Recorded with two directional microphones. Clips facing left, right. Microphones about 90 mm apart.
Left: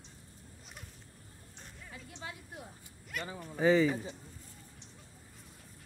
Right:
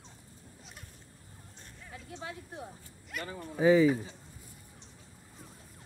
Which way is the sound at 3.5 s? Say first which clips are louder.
Right 4 dB; 5° right (ahead or behind).